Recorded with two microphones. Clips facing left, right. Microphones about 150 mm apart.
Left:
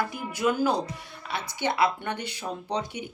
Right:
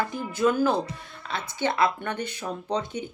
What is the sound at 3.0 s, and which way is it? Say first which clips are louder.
Speech: right 3 dB; 30° right (ahead or behind).